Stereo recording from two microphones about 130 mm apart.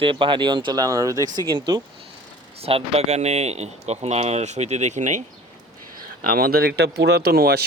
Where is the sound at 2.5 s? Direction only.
50° right (ahead or behind); by 5.2 s 65° right (ahead or behind).